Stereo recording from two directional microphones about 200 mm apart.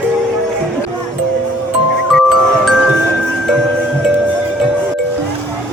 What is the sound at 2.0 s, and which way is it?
Glockenspiel, centre (ahead or behind).